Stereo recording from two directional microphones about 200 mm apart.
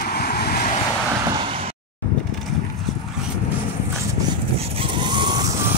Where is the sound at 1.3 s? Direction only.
25° right (ahead or behind).